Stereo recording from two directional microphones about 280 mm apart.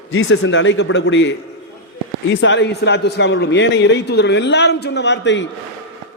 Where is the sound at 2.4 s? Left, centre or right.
Left.